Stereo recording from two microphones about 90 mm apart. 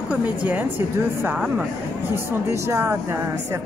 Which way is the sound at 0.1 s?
15° right (ahead or behind).